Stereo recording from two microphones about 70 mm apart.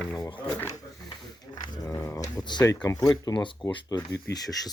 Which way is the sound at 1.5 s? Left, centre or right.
Left.